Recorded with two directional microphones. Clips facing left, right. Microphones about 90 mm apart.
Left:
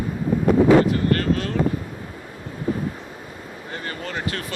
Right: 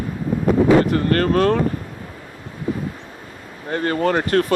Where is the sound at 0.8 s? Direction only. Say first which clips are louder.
Right 3 dB; 50° right (ahead or behind).